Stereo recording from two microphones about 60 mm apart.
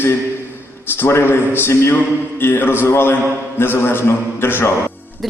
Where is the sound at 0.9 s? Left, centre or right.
Left.